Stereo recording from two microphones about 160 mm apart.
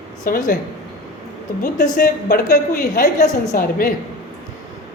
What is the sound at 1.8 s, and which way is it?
A woman's voice, 60° left (ahead or behind).